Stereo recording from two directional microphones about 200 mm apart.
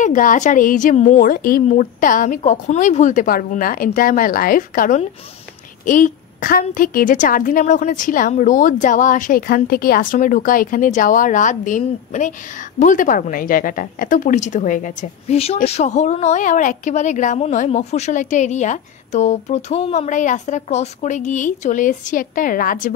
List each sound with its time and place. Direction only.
0.0 s a woman's voice: 40° left (ahead or behind)